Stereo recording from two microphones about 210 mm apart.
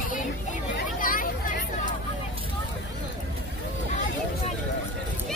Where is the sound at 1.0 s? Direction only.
40° left (ahead or behind).